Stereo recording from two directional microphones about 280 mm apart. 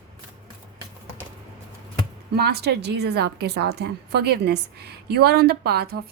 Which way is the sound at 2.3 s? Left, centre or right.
Right.